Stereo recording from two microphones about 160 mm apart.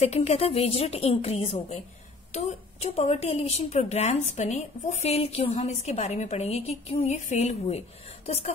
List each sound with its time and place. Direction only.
0.0 s a woman's voice: 40° left (ahead or behind)